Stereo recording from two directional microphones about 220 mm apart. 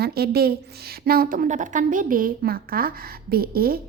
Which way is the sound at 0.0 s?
45° right (ahead or behind).